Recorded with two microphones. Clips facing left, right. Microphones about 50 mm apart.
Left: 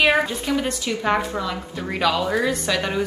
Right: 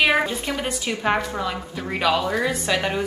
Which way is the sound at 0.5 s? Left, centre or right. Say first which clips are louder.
Left 4 dB; centre.